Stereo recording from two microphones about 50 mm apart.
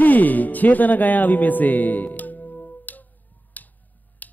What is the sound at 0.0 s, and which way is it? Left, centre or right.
Speech, left.